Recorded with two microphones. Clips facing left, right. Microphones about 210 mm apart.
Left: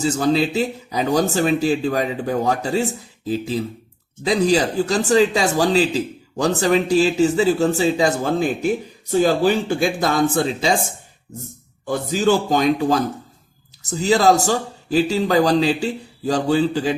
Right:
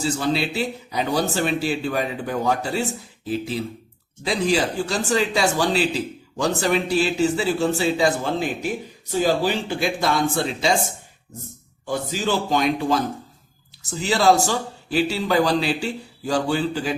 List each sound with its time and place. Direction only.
0.0 s a man's voice: 40° left (ahead or behind)
4.3 s a man's voice: 40° left (ahead or behind)
11.9 s a man's voice: 45° left (ahead or behind)